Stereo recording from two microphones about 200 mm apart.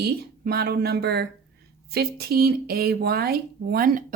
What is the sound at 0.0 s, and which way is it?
Speech, 50° right (ahead or behind).